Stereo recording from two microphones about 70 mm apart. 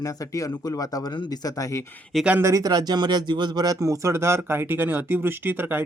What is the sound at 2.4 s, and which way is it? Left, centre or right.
Speech, right.